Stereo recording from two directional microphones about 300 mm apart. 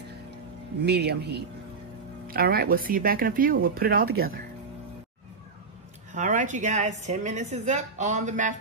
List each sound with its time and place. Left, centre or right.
0.8 s a woman's voice: right
6.1 s a woman's voice: right